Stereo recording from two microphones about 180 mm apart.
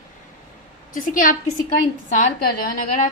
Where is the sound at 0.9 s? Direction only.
50° left (ahead or behind).